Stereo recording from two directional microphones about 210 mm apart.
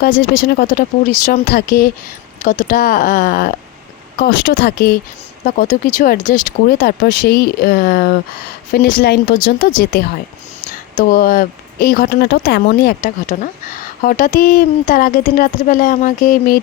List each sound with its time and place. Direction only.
0.2 s speech: 45° left (ahead or behind)